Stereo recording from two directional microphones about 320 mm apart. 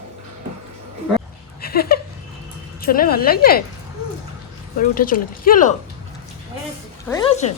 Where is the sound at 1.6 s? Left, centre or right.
Left.